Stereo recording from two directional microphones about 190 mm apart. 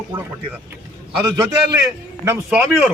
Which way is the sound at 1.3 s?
20° right (ahead or behind).